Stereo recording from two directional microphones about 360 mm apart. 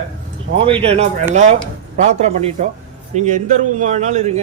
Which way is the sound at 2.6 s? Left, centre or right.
Right.